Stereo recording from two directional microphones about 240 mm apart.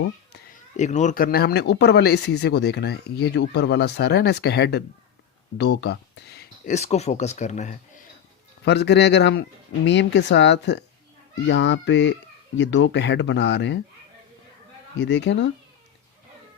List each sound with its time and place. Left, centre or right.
0.8 s speech: left
6.7 s speech: left
8.6 s speech: left
15.0 s speech: left